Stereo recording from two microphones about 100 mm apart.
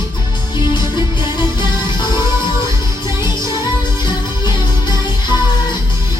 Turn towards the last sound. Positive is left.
turn(degrees=45)  # may be behind; listen again after turning